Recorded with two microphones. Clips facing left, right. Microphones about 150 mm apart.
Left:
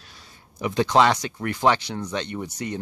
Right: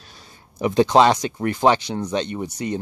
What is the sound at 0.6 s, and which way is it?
Speech, 30° right (ahead or behind).